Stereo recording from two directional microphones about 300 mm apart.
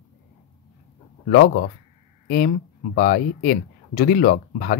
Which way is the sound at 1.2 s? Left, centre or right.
Left.